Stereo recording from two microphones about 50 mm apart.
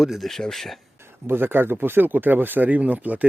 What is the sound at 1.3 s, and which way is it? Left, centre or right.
Speech, right.